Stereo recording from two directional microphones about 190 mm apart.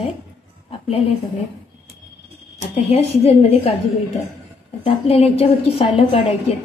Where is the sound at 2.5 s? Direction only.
30° left (ahead or behind).